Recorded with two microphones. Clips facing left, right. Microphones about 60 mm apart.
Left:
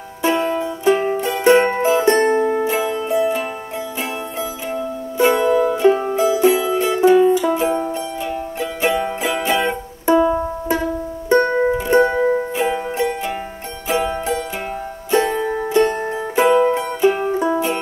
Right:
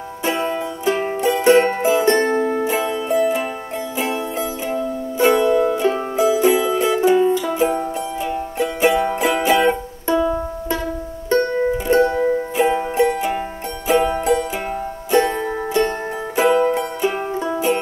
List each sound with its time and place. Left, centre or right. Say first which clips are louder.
0.2 s music: left 3 dB; centre
5.1 s music: even; centre
10.0 s music: left 4 dB; left
11.9 s music: left 1 dB; centre
12.5 s music: right 3 dB; centre